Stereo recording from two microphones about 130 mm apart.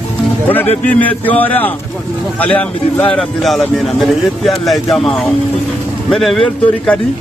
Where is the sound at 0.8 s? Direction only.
10° left (ahead or behind).